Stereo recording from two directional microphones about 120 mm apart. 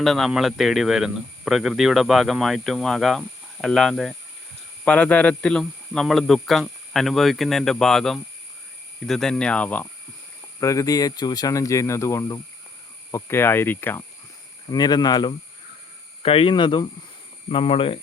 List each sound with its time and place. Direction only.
0.0 s speech: centre (ahead or behind)
9.0 s cricket: 5° left (ahead or behind)
10.6 s speech: 25° left (ahead or behind)
14.7 s speech: 35° left (ahead or behind)
16.2 s speech: 50° left (ahead or behind)